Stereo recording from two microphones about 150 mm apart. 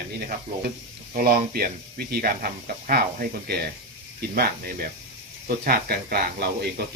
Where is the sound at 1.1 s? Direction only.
75° right (ahead or behind).